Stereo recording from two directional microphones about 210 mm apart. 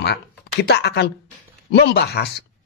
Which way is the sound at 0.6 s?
50° left (ahead or behind).